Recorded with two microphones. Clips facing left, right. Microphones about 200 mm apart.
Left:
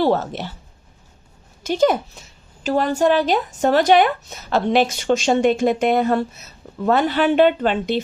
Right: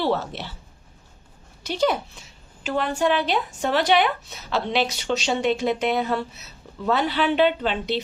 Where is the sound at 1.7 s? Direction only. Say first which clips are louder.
Left 5 dB; 45° left (ahead or behind).